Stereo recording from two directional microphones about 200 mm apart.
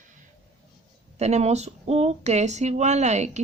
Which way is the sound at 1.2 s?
35° right (ahead or behind).